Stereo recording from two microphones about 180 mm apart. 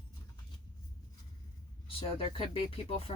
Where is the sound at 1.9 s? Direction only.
30° left (ahead or behind).